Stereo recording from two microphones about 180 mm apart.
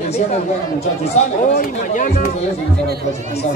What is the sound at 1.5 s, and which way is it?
Speech, 55° left (ahead or behind).